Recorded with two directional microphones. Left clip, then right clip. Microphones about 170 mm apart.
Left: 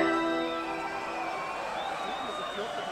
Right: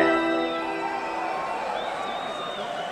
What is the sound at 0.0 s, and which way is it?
Music, 40° left (ahead or behind).